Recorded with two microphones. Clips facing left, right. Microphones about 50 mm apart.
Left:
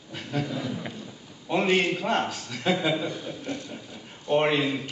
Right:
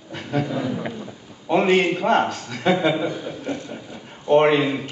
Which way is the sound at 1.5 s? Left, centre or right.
Centre.